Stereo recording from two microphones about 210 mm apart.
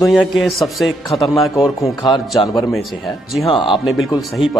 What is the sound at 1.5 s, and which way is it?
Speech, 15° left (ahead or behind).